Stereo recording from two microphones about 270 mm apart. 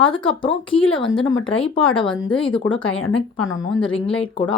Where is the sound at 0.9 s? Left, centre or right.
Centre.